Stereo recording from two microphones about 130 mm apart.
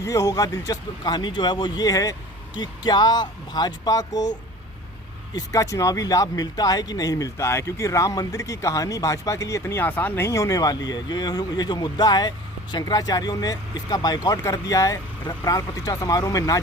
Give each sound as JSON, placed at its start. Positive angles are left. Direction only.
{"t": 0.0, "sound": "speech", "side_deg": 25}
{"t": 5.3, "sound": "speech", "side_deg": 30}